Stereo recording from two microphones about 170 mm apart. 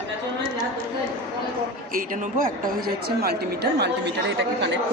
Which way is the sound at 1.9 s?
55° right (ahead or behind).